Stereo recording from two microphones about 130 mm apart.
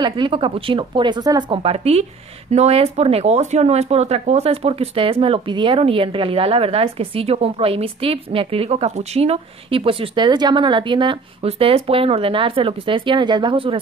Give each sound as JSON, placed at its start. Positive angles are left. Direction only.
{"t": 0.0, "sound": "speech", "side_deg": -40}
{"t": 1.6, "sound": "speech", "side_deg": -50}